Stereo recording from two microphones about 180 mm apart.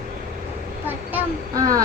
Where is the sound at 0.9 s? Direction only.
15° right (ahead or behind).